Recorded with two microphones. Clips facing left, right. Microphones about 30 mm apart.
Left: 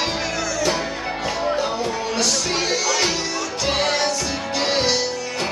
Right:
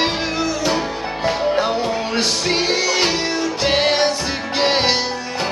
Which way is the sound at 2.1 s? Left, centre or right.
Right.